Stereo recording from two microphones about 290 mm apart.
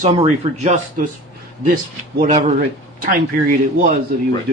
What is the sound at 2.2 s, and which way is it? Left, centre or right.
Speech, right.